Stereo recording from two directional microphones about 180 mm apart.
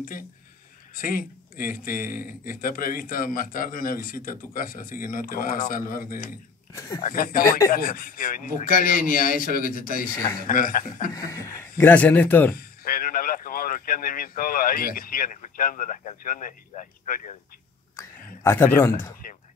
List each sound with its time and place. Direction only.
0.9 s speech: 50° left (ahead or behind)
6.7 s speech: 15° left (ahead or behind)
7.0 s speech: 50° left (ahead or behind)
7.4 s speech: 20° left (ahead or behind)
7.7 s speech: 55° left (ahead or behind)
10.1 s speech: 20° left (ahead or behind)
10.4 s speech: 50° left (ahead or behind)
11.1 s speech: 20° left (ahead or behind)
12.5 s speech: 55° left (ahead or behind)
17.9 s a sound: 15° left (ahead or behind)
19.2 s speech: 50° left (ahead or behind)